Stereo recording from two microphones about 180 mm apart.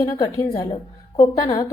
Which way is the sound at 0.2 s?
20° left (ahead or behind).